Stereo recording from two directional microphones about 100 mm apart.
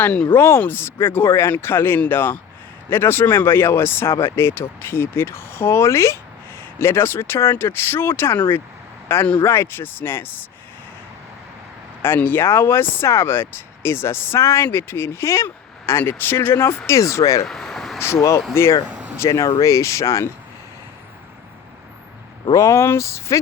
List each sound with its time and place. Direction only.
0.0 s speech: 10° left (ahead or behind)
0.3 s speech: 25° left (ahead or behind)
12.0 s speech: 20° left (ahead or behind)
17.4 s speech: 5° left (ahead or behind)
18.0 s speech: 30° left (ahead or behind)
18.9 s a sound: 10° right (ahead or behind)
19.2 s speech: 30° left (ahead or behind)
22.5 s speech: 30° left (ahead or behind)